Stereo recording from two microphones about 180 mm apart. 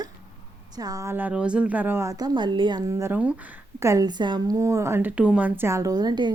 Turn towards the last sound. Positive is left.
turn(degrees=-20)  # may be behind; listen again after turning